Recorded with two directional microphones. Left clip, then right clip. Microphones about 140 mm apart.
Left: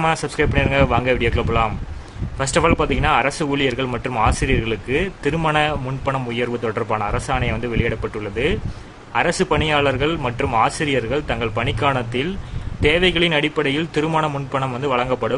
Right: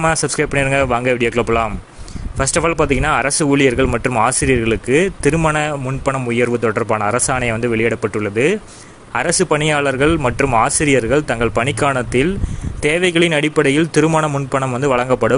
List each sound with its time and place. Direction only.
0.0 s speech: 35° right (ahead or behind)